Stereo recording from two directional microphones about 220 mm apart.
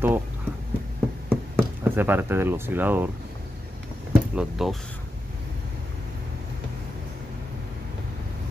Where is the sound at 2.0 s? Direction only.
10° right (ahead or behind).